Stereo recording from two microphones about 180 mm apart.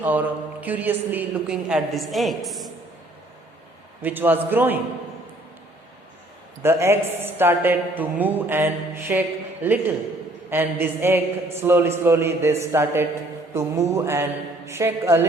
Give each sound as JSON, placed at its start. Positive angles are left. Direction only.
{"t": 0.0, "sound": "a man's voice", "side_deg": -10}
{"t": 4.0, "sound": "a man's voice", "side_deg": -10}
{"t": 6.6, "sound": "a man's voice", "side_deg": -15}